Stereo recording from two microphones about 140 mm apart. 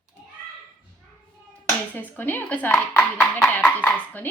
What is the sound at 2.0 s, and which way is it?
A woman's voice, 15° left (ahead or behind).